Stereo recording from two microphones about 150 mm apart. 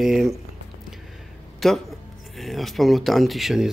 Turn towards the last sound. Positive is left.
turn(degrees=0)  # may be behind; listen again after turning